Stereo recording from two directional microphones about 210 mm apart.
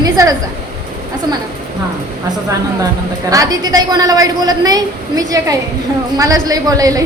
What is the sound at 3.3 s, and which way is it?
A woman's voice, 15° right (ahead or behind).